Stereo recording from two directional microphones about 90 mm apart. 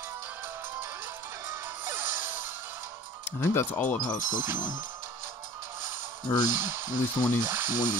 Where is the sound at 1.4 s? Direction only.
25° right (ahead or behind).